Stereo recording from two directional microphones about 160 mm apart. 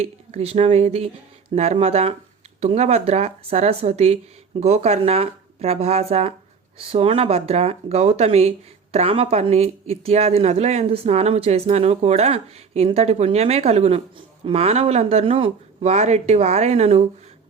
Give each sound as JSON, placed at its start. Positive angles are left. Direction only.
{"t": 0.0, "sound": "speech", "side_deg": -40}